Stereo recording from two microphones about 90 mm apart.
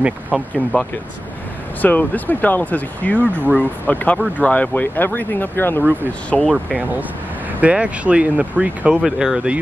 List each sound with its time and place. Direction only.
0.3 s speech: 15° right (ahead or behind)
1.8 s speech: 20° left (ahead or behind)
6.3 s speech: 5° left (ahead or behind)
7.6 s speech: 15° right (ahead or behind)